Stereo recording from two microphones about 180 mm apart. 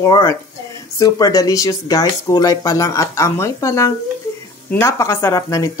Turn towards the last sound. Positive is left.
turn(degrees=20)  # may be behind; listen again after turning